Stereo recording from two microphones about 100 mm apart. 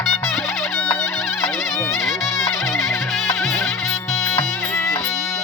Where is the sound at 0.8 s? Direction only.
20° left (ahead or behind).